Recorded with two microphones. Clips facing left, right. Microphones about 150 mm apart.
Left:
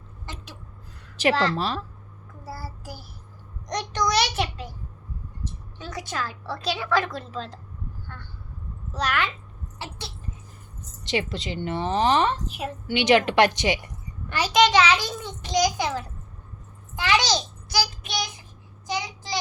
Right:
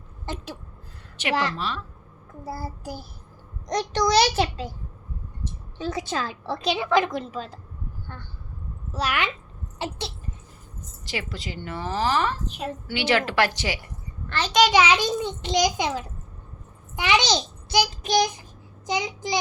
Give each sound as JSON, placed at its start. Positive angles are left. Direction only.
{"t": 1.2, "sound": "speech", "side_deg": 35}
{"t": 2.5, "sound": "a woman's voice", "side_deg": -20}
{"t": 5.8, "sound": "a woman's voice", "side_deg": -25}
{"t": 8.9, "sound": "a child's voice", "side_deg": -10}
{"t": 9.7, "sound": "a sound", "side_deg": -20}
{"t": 11.1, "sound": "a woman's voice", "side_deg": 20}
{"t": 13.6, "sound": "a sound", "side_deg": 20}
{"t": 14.7, "sound": "a woman's voice", "side_deg": -15}
{"t": 18.0, "sound": "child singing", "side_deg": -40}
{"t": 18.9, "sound": "a child's voice", "side_deg": -20}